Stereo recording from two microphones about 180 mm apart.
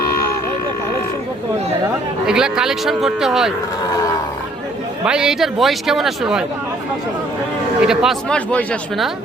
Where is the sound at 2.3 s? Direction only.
5° right (ahead or behind).